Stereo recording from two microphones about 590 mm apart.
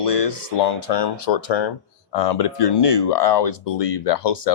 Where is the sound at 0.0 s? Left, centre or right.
Left.